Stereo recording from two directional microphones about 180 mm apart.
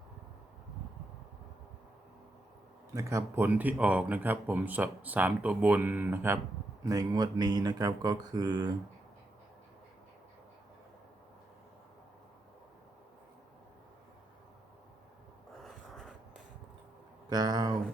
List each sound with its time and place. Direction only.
2.9 s speech: 15° right (ahead or behind)
15.6 s a sound: centre (ahead or behind)
17.2 s speech: 20° right (ahead or behind)